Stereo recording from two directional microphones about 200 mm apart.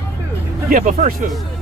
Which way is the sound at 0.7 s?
40° right (ahead or behind).